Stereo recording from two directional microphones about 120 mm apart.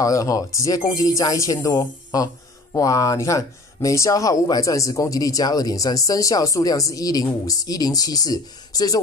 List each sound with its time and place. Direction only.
0.0 s speech: 30° left (ahead or behind)